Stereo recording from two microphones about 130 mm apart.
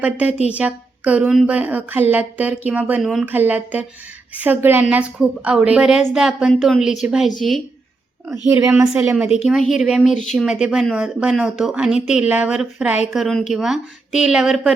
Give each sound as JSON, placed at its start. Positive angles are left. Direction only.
{"t": 0.0, "sound": "a woman's voice", "side_deg": -10}
{"t": 3.0, "sound": "speech", "side_deg": 0}
{"t": 3.2, "sound": "a woman's voice", "side_deg": -15}
{"t": 8.4, "sound": "a woman's voice", "side_deg": -20}
{"t": 9.1, "sound": "a woman's voice", "side_deg": -5}